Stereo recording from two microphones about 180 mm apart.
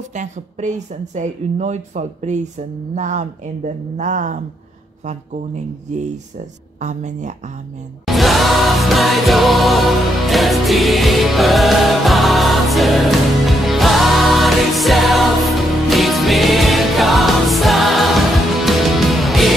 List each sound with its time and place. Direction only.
0.1 s speech: 40° right (ahead or behind)
6.8 s speech: 40° right (ahead or behind)
8.0 s music: centre (ahead or behind)